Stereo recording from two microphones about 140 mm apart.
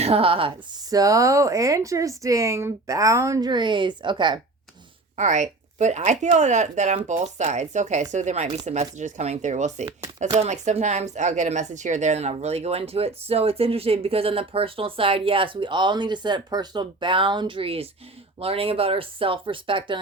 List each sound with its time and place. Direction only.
0.0 s speech: 45° right (ahead or behind)
0.9 s speech: 25° right (ahead or behind)
5.1 s speech: 55° right (ahead or behind); by 20.0 s 35° right (ahead or behind)